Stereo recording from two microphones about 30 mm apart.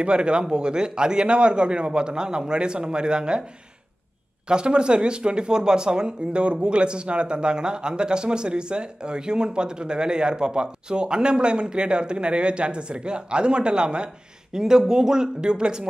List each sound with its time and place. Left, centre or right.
0.0 s speech: right
4.5 s speech: right
6.3 s speech: right
14.6 s speech: centre